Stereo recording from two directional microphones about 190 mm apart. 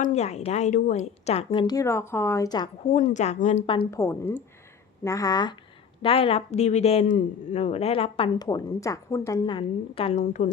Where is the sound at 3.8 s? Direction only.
15° left (ahead or behind).